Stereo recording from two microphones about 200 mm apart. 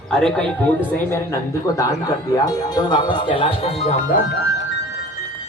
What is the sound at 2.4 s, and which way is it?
Speech, 20° left (ahead or behind).